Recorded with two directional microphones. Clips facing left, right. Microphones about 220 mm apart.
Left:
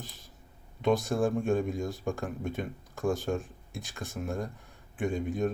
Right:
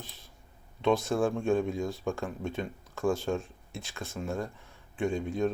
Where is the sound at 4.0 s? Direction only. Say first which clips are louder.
Even; 15° left (ahead or behind).